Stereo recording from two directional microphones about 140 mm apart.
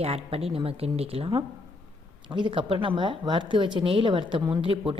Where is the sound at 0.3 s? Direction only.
45° right (ahead or behind).